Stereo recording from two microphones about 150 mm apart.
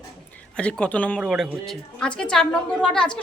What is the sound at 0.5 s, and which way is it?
A woman's voice, 5° left (ahead or behind).